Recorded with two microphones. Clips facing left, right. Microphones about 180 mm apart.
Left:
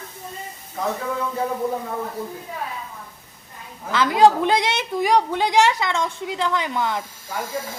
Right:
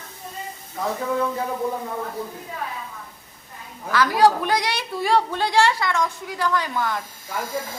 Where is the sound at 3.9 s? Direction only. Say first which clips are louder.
Left 2 dB; 20° left (ahead or behind).